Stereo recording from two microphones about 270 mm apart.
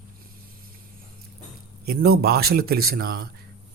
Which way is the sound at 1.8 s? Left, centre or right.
Right.